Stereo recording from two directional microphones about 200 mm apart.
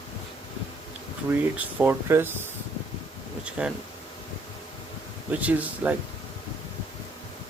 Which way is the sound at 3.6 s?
10° right (ahead or behind).